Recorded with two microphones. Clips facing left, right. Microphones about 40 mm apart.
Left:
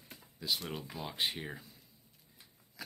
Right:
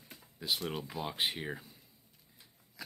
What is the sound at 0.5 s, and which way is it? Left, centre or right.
Speech, centre.